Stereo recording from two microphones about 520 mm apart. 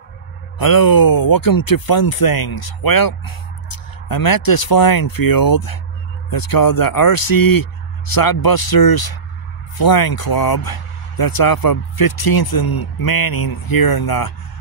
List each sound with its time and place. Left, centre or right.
0.6 s speech: left